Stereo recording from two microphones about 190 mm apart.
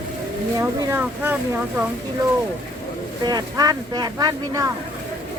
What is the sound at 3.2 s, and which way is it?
Speech, 20° right (ahead or behind).